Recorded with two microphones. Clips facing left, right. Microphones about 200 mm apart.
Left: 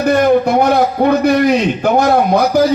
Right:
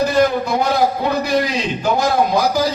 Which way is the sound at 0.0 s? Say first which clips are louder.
Left 5 dB; 60° left (ahead or behind).